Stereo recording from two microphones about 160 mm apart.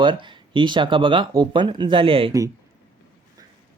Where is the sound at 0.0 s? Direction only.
30° right (ahead or behind).